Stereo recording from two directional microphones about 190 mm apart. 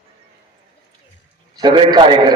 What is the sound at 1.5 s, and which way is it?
Speech, 25° right (ahead or behind).